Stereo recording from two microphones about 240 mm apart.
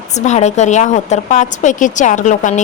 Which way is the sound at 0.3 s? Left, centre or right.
Left.